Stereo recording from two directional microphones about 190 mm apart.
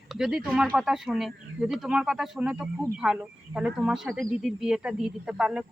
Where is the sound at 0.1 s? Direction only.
Centre (ahead or behind).